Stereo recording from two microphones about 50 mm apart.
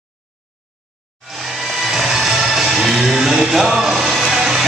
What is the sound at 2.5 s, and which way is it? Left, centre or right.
Music, centre.